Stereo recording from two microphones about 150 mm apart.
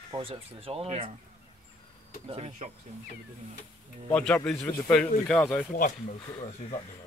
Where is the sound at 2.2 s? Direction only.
40° right (ahead or behind).